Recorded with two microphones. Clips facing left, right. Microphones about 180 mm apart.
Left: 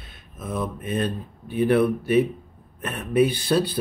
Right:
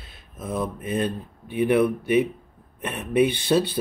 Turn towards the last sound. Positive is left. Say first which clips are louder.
# right 1 dB
turn(degrees=-25)  # may be behind; listen again after turning